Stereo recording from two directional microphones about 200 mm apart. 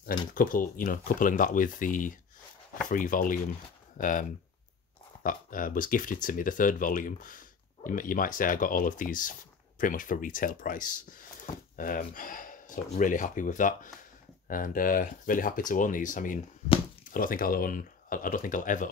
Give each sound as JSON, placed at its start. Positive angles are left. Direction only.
{"t": 0.3, "sound": "speech", "side_deg": 45}